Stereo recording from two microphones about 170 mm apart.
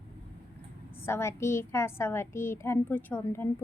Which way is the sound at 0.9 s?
15° left (ahead or behind).